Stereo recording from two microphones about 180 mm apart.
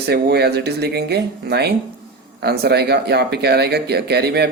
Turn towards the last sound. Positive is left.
turn(degrees=-65)  # may be behind; listen again after turning